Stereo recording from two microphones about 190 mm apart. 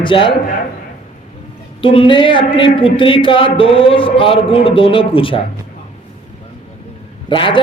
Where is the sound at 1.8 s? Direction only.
30° left (ahead or behind).